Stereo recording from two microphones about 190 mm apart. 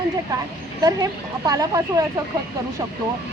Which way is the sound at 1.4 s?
20° right (ahead or behind).